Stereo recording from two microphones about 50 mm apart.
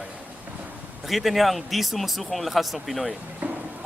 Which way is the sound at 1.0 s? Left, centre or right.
Centre.